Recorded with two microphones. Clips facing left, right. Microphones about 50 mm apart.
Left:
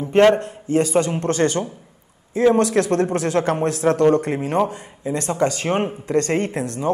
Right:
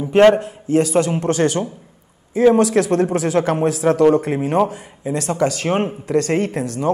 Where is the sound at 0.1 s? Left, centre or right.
Centre.